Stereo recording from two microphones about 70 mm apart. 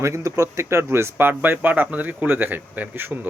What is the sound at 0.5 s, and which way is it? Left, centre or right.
Speech, right.